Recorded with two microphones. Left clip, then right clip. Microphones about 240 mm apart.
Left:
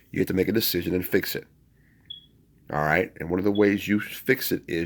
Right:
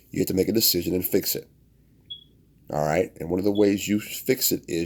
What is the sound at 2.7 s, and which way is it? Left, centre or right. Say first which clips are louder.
Speech: even; left.